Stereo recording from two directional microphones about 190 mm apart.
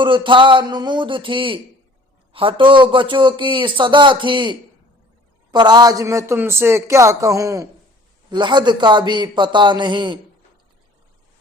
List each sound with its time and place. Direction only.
0.0 s a man's voice: 25° right (ahead or behind)